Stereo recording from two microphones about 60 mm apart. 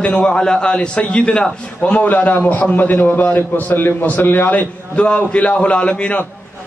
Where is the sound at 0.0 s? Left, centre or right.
Centre.